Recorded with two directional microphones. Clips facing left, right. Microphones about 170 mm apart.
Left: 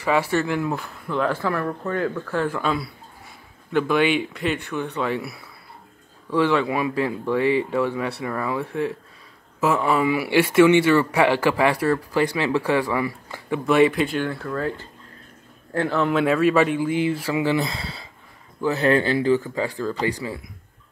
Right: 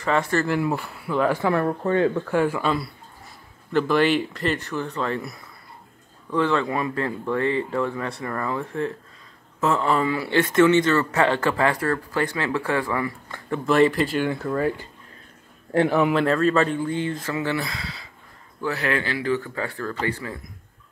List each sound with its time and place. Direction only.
0.0 s speech: 5° left (ahead or behind)
1.4 s speech: 25° right (ahead or behind); by 5.3 s 5° left (ahead or behind)
6.3 s speech: 10° left (ahead or behind)
14.2 s speech: 10° right (ahead or behind)
16.1 s speech: 5° left (ahead or behind); by 19.3 s 25° left (ahead or behind)
19.3 s speech: 15° left (ahead or behind)